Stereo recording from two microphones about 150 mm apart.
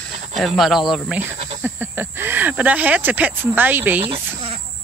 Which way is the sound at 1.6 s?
15° right (ahead or behind).